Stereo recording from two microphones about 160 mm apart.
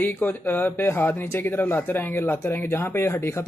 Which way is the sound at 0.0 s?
10° left (ahead or behind).